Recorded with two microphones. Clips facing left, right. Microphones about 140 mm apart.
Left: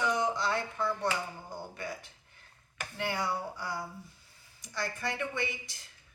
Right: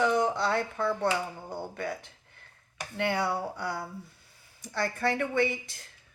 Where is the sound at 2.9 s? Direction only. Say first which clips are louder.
Right 5 dB; 65° right (ahead or behind).